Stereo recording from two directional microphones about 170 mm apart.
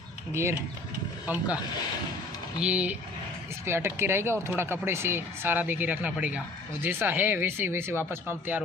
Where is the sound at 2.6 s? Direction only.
5° right (ahead or behind).